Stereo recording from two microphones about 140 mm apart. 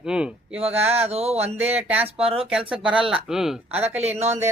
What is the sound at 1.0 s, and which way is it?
Speech, 50° right (ahead or behind).